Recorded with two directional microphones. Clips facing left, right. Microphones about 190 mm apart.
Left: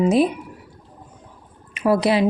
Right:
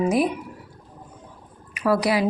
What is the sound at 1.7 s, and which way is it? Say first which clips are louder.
Speech: left 3 dB; 25° left (ahead or behind).